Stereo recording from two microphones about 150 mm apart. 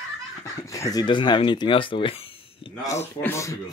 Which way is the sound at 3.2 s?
20° left (ahead or behind).